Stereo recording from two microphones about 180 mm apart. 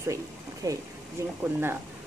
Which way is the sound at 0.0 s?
15° right (ahead or behind).